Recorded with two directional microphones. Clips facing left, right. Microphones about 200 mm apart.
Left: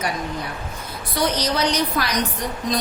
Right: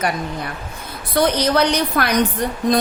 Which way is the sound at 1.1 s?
60° right (ahead or behind).